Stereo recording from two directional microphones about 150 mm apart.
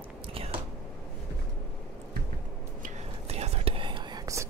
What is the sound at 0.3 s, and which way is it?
Biting, 40° right (ahead or behind).